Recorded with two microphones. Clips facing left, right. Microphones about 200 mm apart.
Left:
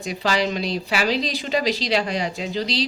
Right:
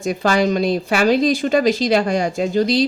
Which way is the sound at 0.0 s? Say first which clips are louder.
Right 6 dB; 50° right (ahead or behind).